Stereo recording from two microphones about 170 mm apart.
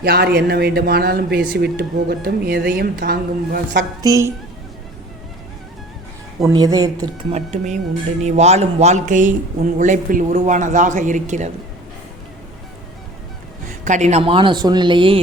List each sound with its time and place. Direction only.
0.0 s speech: 65° right (ahead or behind)
4.0 s speech: 20° right (ahead or behind)
6.4 s speech: 20° right (ahead or behind)
7.3 s speech: 40° right (ahead or behind)
13.7 s speech: 45° right (ahead or behind); by 15.2 s 30° right (ahead or behind)